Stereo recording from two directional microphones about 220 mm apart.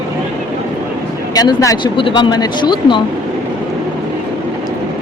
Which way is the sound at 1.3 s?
15° left (ahead or behind).